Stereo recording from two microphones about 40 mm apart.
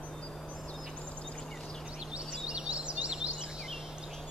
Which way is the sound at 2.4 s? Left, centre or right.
Right.